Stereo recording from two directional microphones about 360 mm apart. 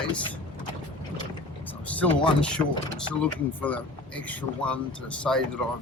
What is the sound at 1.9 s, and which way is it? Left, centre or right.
Speech, centre.